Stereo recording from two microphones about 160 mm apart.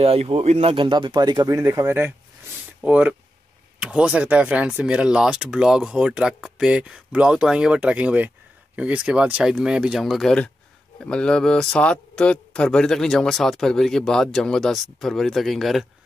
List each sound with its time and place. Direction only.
0.0 s speech: 40° right (ahead or behind); by 15.9 s centre (ahead or behind)